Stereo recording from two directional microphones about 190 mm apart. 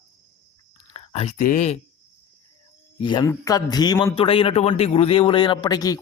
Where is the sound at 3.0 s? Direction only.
25° left (ahead or behind).